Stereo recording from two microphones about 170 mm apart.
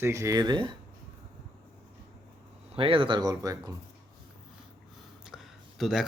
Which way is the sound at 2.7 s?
30° right (ahead or behind).